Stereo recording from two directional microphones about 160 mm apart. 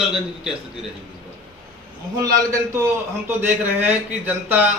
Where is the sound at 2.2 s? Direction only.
20° right (ahead or behind).